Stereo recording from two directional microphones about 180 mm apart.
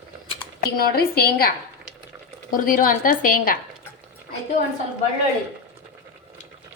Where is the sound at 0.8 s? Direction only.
60° left (ahead or behind).